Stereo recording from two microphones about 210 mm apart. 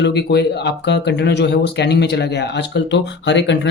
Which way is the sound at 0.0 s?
55° left (ahead or behind).